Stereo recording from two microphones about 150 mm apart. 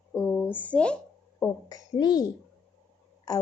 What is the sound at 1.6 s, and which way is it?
Speech, 25° left (ahead or behind).